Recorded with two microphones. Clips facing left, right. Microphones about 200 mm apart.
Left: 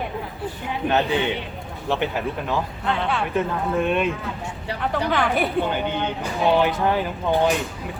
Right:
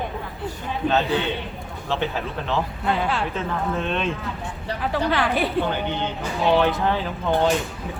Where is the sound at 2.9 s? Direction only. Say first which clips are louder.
Right 1 dB; 5° right (ahead or behind).